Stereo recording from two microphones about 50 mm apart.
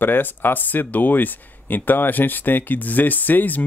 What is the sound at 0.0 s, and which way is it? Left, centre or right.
Speech, left.